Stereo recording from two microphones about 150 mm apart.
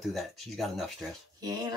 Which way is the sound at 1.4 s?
25° right (ahead or behind).